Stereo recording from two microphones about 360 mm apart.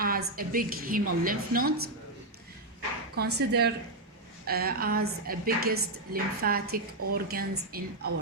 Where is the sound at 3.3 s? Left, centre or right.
Right.